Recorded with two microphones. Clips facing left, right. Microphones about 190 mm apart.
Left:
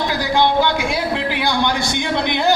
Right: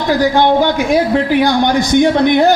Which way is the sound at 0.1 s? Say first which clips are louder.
Right 9 dB; 50° right (ahead or behind).